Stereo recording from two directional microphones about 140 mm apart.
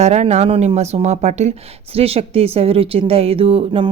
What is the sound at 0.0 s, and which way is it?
Speech, 55° right (ahead or behind).